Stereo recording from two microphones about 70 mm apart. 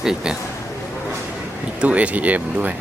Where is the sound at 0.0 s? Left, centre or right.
Centre.